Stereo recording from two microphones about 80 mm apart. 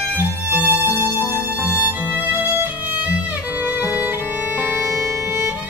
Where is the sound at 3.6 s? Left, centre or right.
Centre.